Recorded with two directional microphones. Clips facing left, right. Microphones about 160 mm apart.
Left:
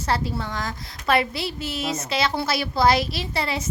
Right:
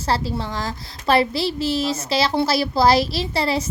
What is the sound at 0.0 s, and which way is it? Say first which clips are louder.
A woman's voice: right 2 dB; 30° right (ahead or behind).